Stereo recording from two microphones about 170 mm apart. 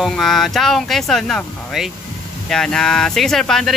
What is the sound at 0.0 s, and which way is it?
Speech, centre (ahead or behind).